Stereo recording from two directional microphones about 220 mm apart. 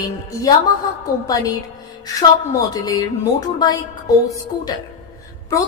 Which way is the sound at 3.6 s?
15° left (ahead or behind).